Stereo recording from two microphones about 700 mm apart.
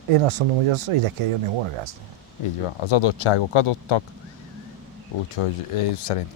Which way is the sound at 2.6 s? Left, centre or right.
Left.